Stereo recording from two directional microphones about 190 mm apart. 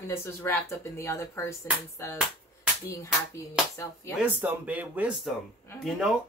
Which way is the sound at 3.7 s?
15° left (ahead or behind).